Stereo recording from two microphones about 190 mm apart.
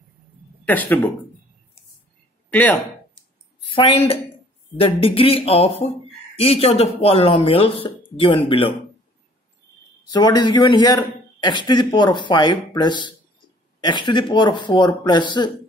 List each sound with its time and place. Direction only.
0.7 s speech: 10° left (ahead or behind)
2.5 s speech: 10° left (ahead or behind)
3.7 s a man's voice: 30° left (ahead or behind)
10.1 s a man's voice: 20° left (ahead or behind)